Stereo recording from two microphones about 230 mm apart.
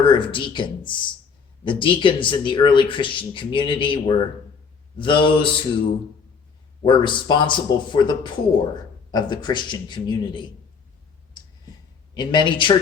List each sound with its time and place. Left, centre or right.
0.0 s speech: left
6.8 s speech: centre
12.1 s speech: centre